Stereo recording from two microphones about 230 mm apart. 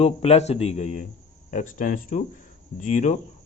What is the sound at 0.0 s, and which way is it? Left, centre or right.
A man's voice, left.